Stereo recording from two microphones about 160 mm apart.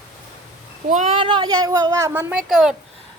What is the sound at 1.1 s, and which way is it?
A woman's voice, 30° right (ahead or behind).